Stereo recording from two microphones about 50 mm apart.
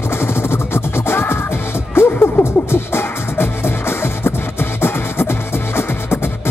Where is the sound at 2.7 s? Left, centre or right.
Left.